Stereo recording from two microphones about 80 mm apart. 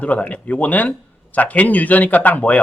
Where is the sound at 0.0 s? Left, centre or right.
Centre.